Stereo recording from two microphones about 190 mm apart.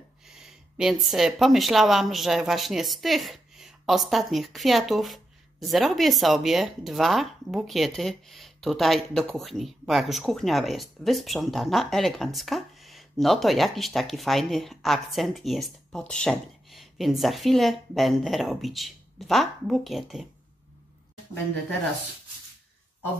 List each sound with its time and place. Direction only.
0.4 s a woman's voice: centre (ahead or behind)